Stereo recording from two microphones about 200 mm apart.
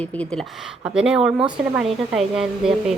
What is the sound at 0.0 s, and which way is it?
A woman's voice, 5° left (ahead or behind).